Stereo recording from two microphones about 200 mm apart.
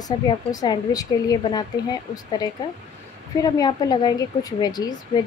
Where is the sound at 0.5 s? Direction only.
20° left (ahead or behind).